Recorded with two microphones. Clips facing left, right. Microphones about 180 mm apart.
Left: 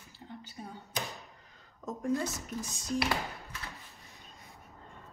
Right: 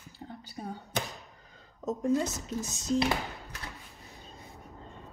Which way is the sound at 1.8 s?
20° right (ahead or behind).